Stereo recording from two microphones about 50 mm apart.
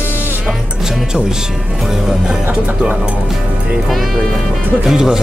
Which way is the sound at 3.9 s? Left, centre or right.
Centre.